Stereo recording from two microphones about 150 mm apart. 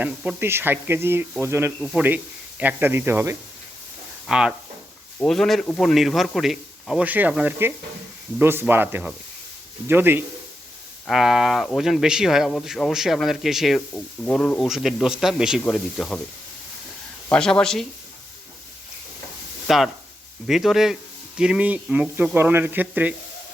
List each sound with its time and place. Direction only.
0.0 s speech: 10° right (ahead or behind)
1.8 s speech: centre (ahead or behind)
11.0 s speech: 5° right (ahead or behind)
13.9 s speech: 10° left (ahead or behind)
17.3 s speech: 5° left (ahead or behind)
19.6 s speech: centre (ahead or behind)